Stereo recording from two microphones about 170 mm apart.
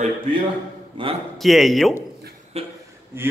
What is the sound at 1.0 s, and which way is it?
Speech, 30° right (ahead or behind).